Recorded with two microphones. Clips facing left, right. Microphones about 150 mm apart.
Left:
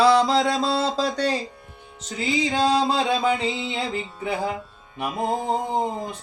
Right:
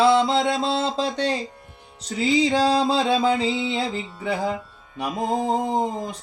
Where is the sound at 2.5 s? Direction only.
30° right (ahead or behind).